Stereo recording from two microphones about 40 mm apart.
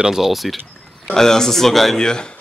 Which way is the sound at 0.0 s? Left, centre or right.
Centre.